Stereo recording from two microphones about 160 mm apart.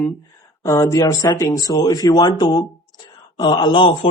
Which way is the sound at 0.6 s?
20° left (ahead or behind).